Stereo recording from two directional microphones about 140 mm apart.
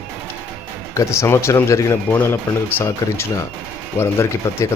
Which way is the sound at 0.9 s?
20° left (ahead or behind).